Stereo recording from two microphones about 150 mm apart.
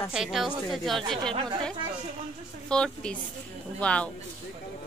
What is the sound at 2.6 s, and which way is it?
A woman's voice, 5° left (ahead or behind).